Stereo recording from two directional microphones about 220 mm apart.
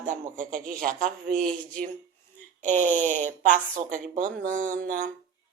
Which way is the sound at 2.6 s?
35° right (ahead or behind).